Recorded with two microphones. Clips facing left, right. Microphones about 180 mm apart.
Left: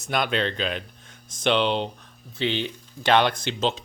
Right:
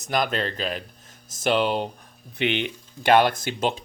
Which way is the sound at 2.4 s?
20° right (ahead or behind).